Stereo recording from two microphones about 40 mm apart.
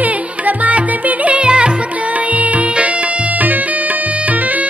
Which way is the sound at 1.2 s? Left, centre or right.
Right.